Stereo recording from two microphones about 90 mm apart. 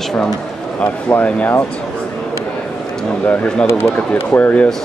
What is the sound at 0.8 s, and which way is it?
Speech, 20° left (ahead or behind).